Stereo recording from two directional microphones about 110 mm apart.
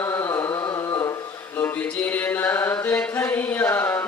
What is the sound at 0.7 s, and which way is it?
Music, 30° left (ahead or behind).